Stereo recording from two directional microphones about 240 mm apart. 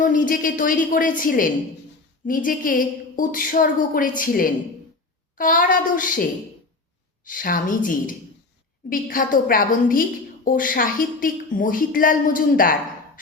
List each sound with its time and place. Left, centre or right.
0.0 s a woman's voice: left
7.3 s a woman's voice: left